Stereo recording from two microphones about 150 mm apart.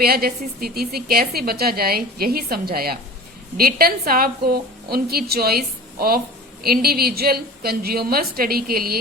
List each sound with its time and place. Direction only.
0.0 s a woman's voice: 90° right